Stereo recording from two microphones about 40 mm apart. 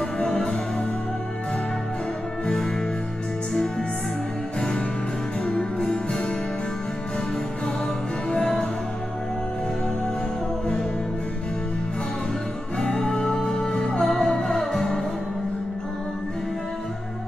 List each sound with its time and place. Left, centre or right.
0.2 s music: centre
2.4 s music: centre
4.6 s music: centre
8.3 s music: centre
12.7 s music: centre
14.0 s music: centre